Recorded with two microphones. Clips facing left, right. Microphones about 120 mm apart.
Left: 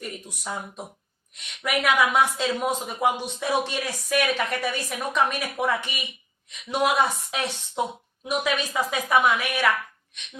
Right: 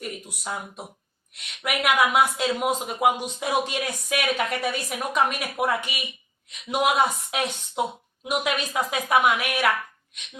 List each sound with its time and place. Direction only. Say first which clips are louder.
0.0 s speech: right 1 dB; 10° right (ahead or behind)